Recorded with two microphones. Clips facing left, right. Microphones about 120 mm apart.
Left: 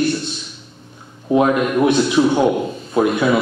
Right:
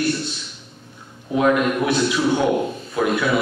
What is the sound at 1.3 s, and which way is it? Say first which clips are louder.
Speech: left 3 dB; 25° left (ahead or behind).